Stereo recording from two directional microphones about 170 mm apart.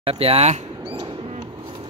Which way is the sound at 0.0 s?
35° right (ahead or behind).